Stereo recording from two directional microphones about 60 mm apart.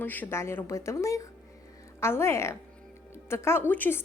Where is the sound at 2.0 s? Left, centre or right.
Left.